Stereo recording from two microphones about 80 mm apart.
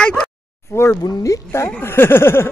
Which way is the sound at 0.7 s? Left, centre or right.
Left.